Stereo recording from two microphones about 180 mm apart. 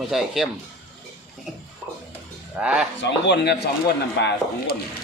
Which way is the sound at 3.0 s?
70° left (ahead or behind).